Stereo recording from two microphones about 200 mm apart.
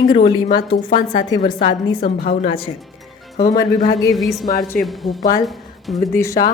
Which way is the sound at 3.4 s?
20° left (ahead or behind).